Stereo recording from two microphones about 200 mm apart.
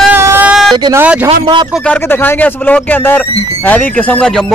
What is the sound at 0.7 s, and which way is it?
Speech, 20° right (ahead or behind).